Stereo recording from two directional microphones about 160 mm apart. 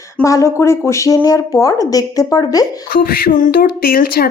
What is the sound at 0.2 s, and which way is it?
Speech, 20° left (ahead or behind).